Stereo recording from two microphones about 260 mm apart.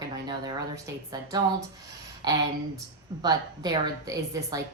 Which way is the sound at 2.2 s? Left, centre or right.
Centre.